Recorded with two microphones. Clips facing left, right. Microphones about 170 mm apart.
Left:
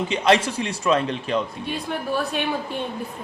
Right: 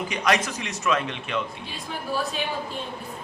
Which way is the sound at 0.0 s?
25° left (ahead or behind).